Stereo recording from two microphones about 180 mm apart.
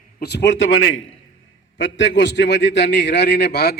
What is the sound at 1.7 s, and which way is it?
A man's voice, 90° left.